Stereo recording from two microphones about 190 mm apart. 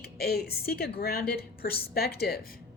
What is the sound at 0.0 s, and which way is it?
A woman's voice, 55° left (ahead or behind).